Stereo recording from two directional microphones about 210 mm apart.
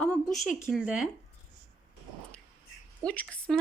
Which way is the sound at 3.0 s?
5° left (ahead or behind).